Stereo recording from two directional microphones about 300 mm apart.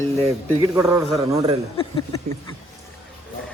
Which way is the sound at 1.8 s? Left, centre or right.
Centre.